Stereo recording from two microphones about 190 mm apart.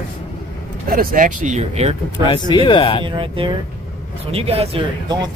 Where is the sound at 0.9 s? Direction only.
50° right (ahead or behind).